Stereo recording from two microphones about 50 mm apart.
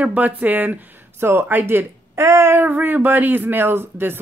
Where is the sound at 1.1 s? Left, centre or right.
Right.